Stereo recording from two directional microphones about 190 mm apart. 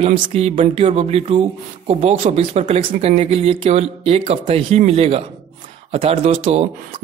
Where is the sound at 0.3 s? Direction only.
35° right (ahead or behind).